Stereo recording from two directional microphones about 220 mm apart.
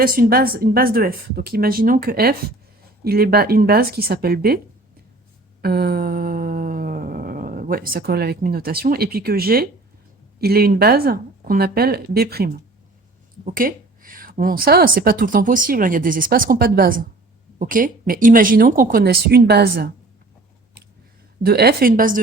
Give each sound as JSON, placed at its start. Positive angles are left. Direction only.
{"t": 0.0, "sound": "speech", "side_deg": -40}
{"t": 5.6, "sound": "dog", "side_deg": -45}
{"t": 10.3, "sound": "speech", "side_deg": -45}
{"t": 21.4, "sound": "speech", "side_deg": -45}